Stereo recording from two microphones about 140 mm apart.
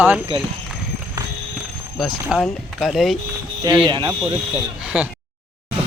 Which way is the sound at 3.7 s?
35° right (ahead or behind).